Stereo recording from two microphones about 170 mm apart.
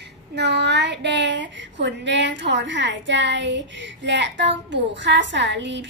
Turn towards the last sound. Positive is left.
turn(degrees=-90)